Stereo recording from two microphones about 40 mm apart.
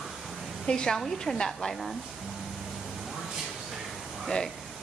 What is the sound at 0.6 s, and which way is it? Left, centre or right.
Speech, left.